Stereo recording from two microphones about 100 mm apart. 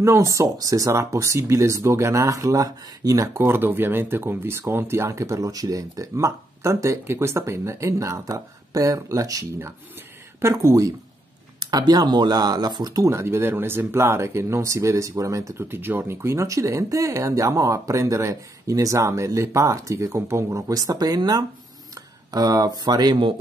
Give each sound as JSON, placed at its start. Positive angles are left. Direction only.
{"t": 0.0, "sound": "speech", "side_deg": -30}
{"t": 3.4, "sound": "speech", "side_deg": -20}
{"t": 11.6, "sound": "speech", "side_deg": -45}